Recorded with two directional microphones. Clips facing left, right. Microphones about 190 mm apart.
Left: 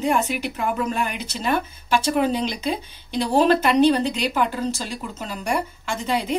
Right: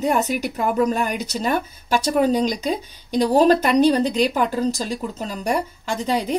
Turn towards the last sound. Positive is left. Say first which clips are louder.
# right 2 dB
turn(degrees=-40)  # may be behind; listen again after turning